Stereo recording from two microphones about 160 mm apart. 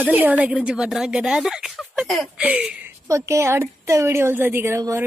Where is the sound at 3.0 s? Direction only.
20° right (ahead or behind).